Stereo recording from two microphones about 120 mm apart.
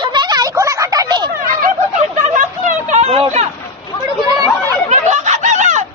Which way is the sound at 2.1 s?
90° right.